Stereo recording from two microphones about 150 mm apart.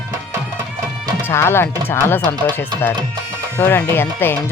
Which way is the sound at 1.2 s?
15° left (ahead or behind).